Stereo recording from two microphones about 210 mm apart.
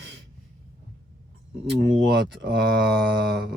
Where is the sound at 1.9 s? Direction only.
55° right (ahead or behind).